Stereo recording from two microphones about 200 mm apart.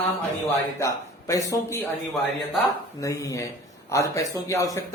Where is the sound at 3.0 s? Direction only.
15° left (ahead or behind).